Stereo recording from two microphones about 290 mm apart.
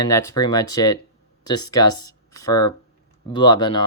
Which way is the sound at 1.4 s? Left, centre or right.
Left.